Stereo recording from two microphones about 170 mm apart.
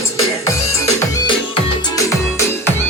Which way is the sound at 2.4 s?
15° left (ahead or behind).